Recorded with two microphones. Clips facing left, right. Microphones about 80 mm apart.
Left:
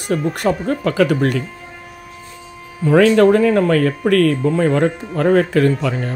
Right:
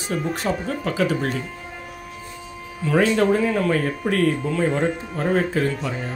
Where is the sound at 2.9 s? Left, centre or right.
Left.